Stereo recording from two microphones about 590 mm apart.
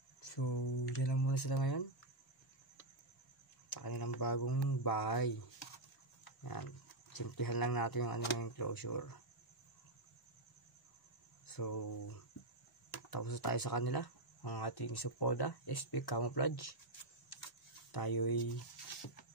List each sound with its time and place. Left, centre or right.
0.2 s a sound: left
1.0 s speech: left
3.8 s speech: left
6.4 s speech: left
11.4 s speech: left
17.9 s speech: left